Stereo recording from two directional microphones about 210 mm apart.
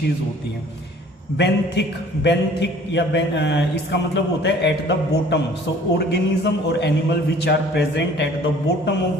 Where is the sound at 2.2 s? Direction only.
55° left (ahead or behind).